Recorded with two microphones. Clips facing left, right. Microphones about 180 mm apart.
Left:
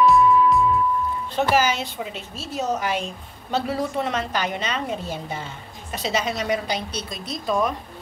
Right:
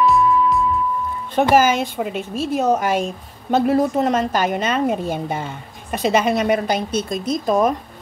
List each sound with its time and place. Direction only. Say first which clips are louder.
0.0 s music: even; centre (ahead or behind)
1.5 s a woman's voice: right 6 dB; 50° right (ahead or behind)